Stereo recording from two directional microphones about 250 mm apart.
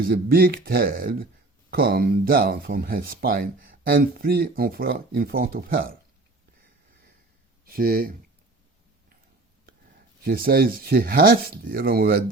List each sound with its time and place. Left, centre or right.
0.1 s speech: right
7.6 s speech: right
10.2 s speech: right